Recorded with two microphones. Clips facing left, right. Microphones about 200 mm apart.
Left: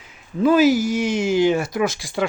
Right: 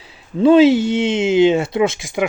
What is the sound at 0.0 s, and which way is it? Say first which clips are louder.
Speech: right 5 dB; 30° right (ahead or behind).